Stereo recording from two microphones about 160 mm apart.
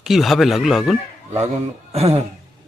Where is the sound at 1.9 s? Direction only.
40° right (ahead or behind).